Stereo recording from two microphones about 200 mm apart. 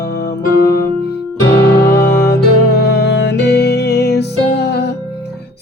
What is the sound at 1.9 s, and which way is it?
Music, 60° left (ahead or behind).